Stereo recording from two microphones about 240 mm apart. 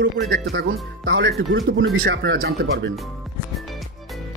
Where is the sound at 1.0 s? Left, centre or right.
Right.